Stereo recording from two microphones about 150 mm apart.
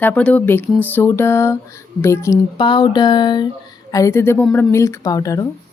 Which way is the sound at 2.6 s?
30° left (ahead or behind).